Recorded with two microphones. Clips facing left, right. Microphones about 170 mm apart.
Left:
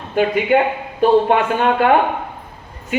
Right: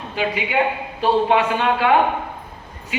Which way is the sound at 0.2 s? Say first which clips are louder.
Left 6 dB; 50° left (ahead or behind).